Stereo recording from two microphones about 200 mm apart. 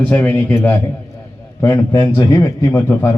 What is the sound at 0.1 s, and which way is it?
Speech, 10° left (ahead or behind).